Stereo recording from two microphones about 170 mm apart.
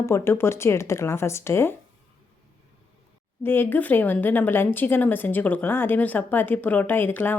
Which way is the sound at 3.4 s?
10° left (ahead or behind).